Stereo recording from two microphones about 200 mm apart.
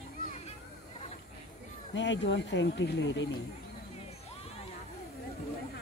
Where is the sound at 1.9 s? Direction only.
65° left (ahead or behind).